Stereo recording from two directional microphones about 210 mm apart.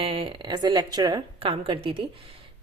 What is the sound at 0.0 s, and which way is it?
A woman's voice, 25° right (ahead or behind).